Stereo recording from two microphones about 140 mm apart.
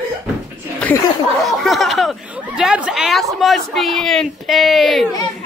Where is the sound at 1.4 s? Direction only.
Centre (ahead or behind).